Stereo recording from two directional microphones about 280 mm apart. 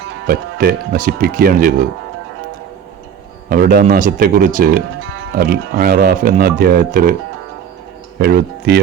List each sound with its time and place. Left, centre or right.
0.3 s speech: right
3.5 s speech: right
8.2 s speech: right